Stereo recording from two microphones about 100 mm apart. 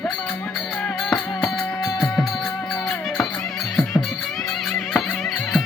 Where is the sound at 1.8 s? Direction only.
30° left (ahead or behind).